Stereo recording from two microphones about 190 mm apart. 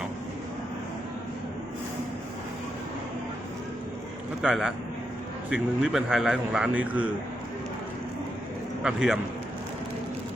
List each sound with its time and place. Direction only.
4.4 s a man's voice: centre (ahead or behind)
8.8 s a man's voice: 5° right (ahead or behind)